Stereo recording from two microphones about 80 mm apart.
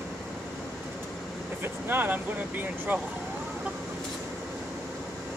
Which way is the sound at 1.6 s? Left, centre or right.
Right.